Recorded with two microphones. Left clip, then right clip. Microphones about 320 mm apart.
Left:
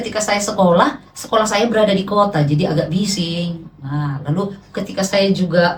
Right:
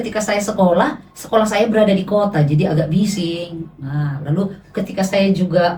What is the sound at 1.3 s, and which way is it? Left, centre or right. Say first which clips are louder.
Speech: even; left.